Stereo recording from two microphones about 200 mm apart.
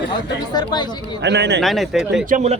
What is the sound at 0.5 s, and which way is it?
Speech, 20° left (ahead or behind).